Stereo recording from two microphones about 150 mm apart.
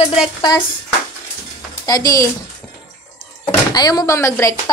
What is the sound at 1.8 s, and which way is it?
Speech, 25° left (ahead or behind).